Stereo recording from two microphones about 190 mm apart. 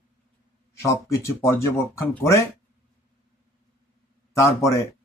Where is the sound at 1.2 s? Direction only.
10° left (ahead or behind).